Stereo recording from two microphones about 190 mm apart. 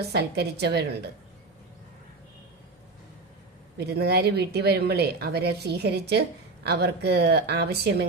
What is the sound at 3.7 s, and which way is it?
Speech, 60° right (ahead or behind).